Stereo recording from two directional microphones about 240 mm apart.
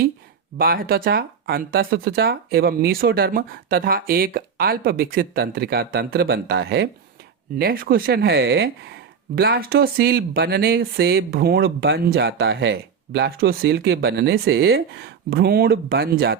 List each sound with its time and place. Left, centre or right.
0.6 s speech: right